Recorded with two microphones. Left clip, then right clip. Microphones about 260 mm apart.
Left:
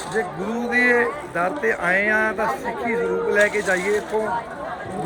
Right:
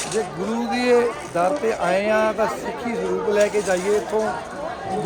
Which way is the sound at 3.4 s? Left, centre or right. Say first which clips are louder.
Left 1 dB; centre.